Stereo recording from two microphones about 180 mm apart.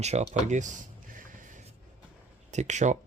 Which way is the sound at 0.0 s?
40° right (ahead or behind).